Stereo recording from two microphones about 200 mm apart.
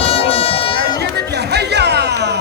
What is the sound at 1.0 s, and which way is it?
Music, 55° right (ahead or behind).